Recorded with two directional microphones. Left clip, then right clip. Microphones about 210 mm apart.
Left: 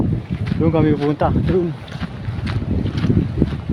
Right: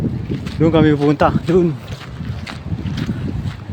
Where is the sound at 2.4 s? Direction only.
25° right (ahead or behind).